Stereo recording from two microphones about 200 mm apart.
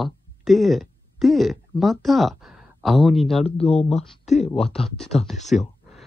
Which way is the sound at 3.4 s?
30° left (ahead or behind).